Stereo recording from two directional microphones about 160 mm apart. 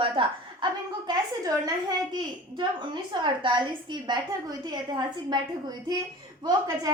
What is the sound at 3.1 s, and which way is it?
A woman's voice, 30° right (ahead or behind).